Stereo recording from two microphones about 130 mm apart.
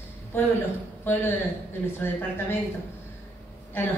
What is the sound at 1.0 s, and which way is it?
A woman's voice, 20° left (ahead or behind).